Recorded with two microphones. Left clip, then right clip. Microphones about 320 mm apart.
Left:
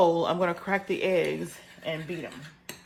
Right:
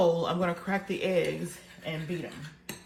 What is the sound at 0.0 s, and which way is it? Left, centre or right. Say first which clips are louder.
Speech: left 3 dB; left.